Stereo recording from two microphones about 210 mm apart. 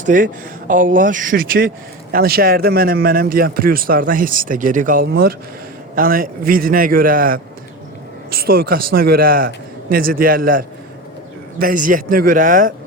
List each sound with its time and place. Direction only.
0.0 s a man's voice: 40° right (ahead or behind)